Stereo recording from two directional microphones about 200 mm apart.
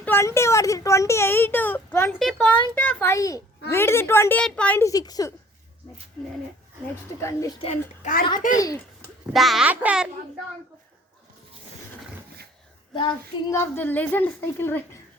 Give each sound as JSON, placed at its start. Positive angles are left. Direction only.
{"t": 0.0, "sound": "a sound", "side_deg": 10}
{"t": 3.7, "sound": "a woman's voice", "side_deg": 10}
{"t": 7.2, "sound": "a woman's voice", "side_deg": 15}
{"t": 7.6, "sound": "a child's voice", "side_deg": 40}
{"t": 9.3, "sound": "a child's voice", "side_deg": 0}
{"t": 13.5, "sound": "a woman's voice", "side_deg": 10}